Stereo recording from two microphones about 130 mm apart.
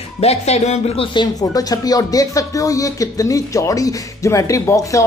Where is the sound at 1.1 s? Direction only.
30° left (ahead or behind).